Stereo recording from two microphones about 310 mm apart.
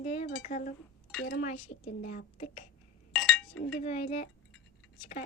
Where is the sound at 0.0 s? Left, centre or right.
Left.